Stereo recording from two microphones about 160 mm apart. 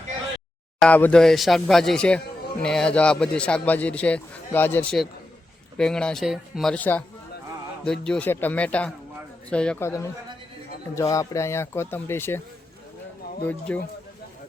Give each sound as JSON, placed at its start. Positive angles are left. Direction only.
{"t": 0.8, "sound": "a man's voice", "side_deg": 10}
{"t": 13.5, "sound": "a man's voice", "side_deg": 10}